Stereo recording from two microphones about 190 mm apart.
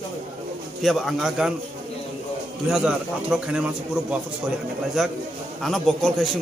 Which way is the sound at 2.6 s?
5° right (ahead or behind).